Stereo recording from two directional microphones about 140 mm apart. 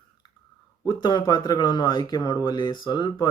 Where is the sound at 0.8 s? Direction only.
35° left (ahead or behind).